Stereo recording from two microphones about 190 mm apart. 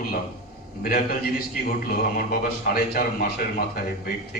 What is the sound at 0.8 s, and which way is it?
A man's voice, 50° left (ahead or behind).